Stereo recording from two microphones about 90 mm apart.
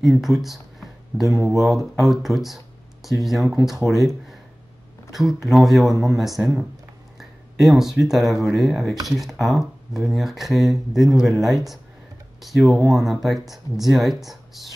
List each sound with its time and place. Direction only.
0.2 s speech: centre (ahead or behind)
1.3 s speech: 40° right (ahead or behind)
1.6 s speech: centre (ahead or behind)